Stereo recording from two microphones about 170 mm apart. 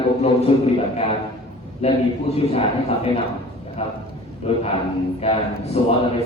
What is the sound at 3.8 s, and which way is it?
Speech, 35° left (ahead or behind).